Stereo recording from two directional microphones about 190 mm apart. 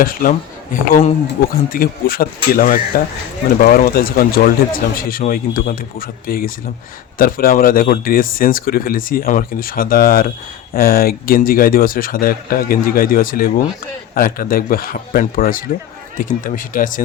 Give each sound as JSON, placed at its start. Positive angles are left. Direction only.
{"t": 0.0, "sound": "speech", "side_deg": 50}